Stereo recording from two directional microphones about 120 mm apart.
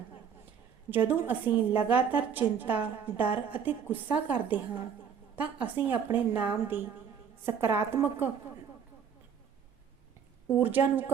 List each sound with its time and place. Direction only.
0.9 s a woman's voice: 15° right (ahead or behind)
10.5 s a woman's voice: 15° right (ahead or behind)